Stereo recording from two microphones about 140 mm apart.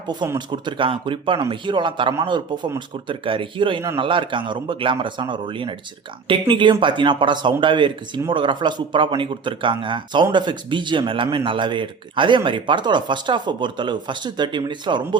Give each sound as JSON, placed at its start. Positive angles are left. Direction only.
{"t": 0.3, "sound": "speech", "side_deg": -35}